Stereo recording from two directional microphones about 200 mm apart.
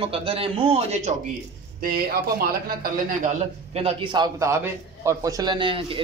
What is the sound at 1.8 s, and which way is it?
Speech, 50° right (ahead or behind).